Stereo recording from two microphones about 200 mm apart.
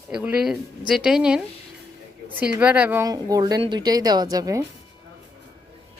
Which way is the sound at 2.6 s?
5° right (ahead or behind).